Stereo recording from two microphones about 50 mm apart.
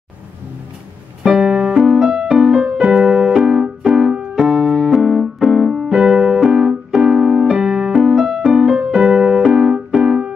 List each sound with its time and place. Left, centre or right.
1.2 s music: centre
3.6 s keyboard: centre
5.9 s music: centre